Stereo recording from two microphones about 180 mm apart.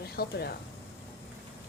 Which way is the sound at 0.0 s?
60° left (ahead or behind).